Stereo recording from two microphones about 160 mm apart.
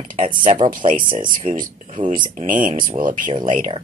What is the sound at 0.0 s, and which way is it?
Speech, 55° right (ahead or behind).